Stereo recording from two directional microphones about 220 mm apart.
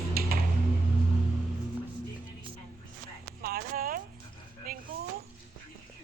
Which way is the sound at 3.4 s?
40° right (ahead or behind).